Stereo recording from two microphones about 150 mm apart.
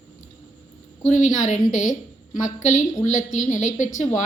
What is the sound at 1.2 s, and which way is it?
Speech, 55° left (ahead or behind).